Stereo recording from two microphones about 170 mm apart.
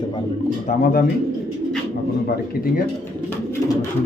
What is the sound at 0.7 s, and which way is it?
Speech, 50° left (ahead or behind).